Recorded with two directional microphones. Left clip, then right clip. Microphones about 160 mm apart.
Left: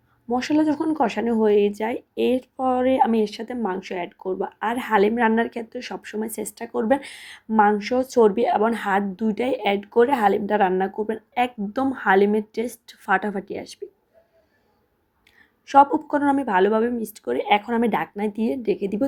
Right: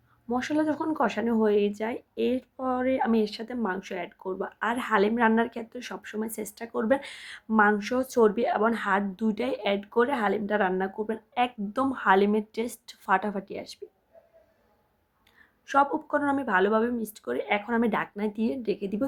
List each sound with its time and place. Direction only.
0.3 s speech: 20° left (ahead or behind)
15.6 s speech: 20° left (ahead or behind)